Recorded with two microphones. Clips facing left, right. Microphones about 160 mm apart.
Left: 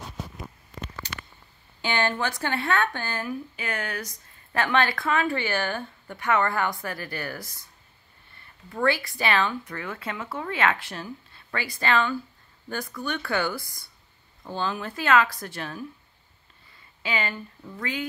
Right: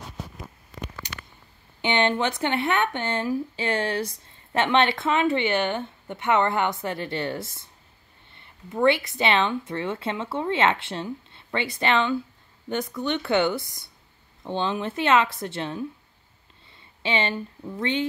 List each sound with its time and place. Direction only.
1.0 s a sound: 15° right (ahead or behind)
1.8 s speech: 20° right (ahead or behind)
17.0 s speech: 25° right (ahead or behind)